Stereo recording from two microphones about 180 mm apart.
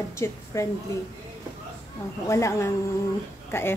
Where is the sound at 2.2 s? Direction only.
15° left (ahead or behind).